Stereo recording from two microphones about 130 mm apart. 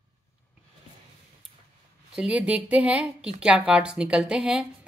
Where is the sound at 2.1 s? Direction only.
10° right (ahead or behind).